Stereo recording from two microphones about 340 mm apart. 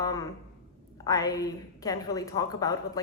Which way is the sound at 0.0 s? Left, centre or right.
Centre.